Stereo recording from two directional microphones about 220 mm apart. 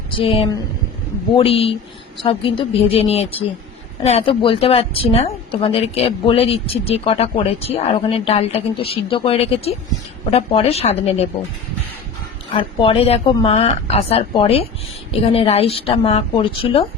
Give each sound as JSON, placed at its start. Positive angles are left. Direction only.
{"t": 0.1, "sound": "a woman's voice", "side_deg": 25}
{"t": 12.5, "sound": "a woman's voice", "side_deg": 25}